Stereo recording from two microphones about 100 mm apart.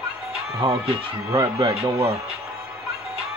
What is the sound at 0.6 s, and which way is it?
Speech, 60° right (ahead or behind).